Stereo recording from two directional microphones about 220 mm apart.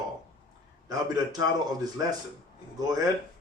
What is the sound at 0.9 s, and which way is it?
A man's voice, 15° right (ahead or behind).